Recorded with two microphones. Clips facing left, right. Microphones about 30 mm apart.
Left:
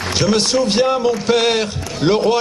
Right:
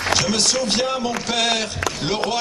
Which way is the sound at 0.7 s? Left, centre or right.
Centre.